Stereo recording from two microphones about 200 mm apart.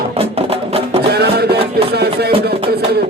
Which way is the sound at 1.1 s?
55° right (ahead or behind).